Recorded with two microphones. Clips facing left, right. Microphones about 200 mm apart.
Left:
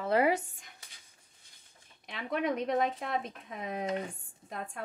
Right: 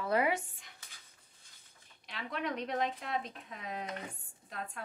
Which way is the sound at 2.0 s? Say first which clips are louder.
Left 6 dB; 50° left (ahead or behind).